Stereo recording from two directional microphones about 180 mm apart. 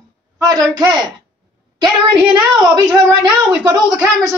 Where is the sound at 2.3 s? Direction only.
25° right (ahead or behind).